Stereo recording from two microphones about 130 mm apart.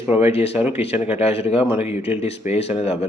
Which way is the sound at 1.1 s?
50° left (ahead or behind).